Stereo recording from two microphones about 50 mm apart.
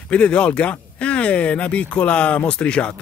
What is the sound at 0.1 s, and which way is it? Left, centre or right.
Speech, left.